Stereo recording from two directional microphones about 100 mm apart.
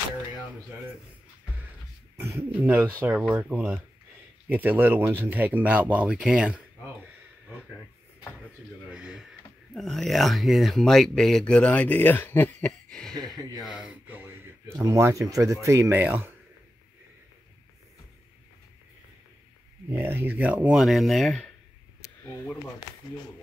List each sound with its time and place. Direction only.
2.1 s speech: 25° right (ahead or behind); by 6.6 s 10° right (ahead or behind)
8.9 s speech: 10° right (ahead or behind)
9.8 s speech: 5° left (ahead or behind); by 12.5 s 20° left (ahead or behind)
12.5 s speech: 5° left (ahead or behind)
13.1 s speech: 40° right (ahead or behind)
13.7 s speech: 10° right (ahead or behind)
19.9 s speech: 25° right (ahead or behind)
20.8 s speech: centre (ahead or behind)